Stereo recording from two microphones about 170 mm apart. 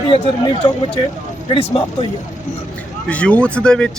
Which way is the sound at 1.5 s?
30° left (ahead or behind).